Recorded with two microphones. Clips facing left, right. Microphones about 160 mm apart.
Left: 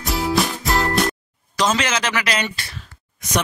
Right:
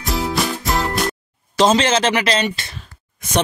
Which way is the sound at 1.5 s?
30° right (ahead or behind).